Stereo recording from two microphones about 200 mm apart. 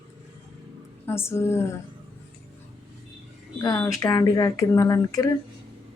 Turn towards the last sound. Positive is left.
turn(degrees=20)  # may be behind; listen again after turning